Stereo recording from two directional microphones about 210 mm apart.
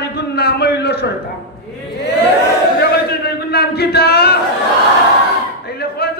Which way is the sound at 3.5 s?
50° left (ahead or behind).